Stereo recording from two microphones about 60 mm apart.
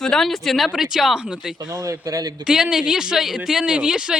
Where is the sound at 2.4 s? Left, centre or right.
Centre.